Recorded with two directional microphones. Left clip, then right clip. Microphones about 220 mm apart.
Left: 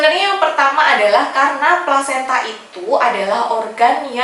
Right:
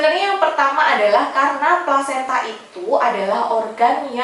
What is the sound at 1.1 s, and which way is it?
A woman's voice, 5° right (ahead or behind).